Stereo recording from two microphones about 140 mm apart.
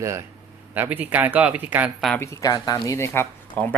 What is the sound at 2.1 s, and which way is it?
Speech, 20° left (ahead or behind).